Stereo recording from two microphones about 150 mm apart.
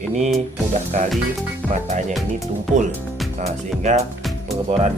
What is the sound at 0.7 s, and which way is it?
Speech, 50° right (ahead or behind).